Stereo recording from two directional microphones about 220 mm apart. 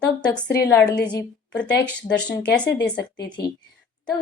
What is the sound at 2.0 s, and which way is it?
Speech, 5° left (ahead or behind).